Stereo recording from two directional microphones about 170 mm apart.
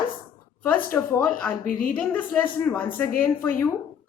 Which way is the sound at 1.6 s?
55° left (ahead or behind).